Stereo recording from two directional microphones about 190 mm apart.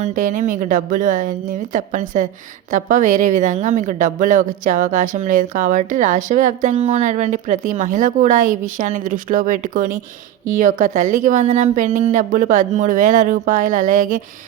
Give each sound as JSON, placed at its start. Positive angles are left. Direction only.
{"t": 0.0, "sound": "a woman's voice", "side_deg": -40}